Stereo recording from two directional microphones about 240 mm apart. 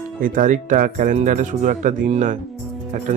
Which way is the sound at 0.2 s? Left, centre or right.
Right.